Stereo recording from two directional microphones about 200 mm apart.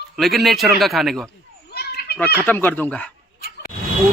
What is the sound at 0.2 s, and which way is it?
Speech, centre (ahead or behind).